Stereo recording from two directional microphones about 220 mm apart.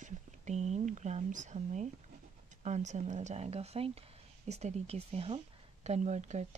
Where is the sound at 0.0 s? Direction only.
30° right (ahead or behind).